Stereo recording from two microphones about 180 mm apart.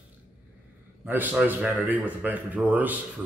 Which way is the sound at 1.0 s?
10° right (ahead or behind).